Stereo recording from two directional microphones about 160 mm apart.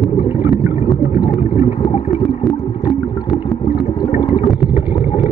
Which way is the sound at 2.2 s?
Centre (ahead or behind).